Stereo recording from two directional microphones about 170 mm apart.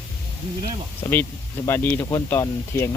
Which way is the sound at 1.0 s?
15° left (ahead or behind).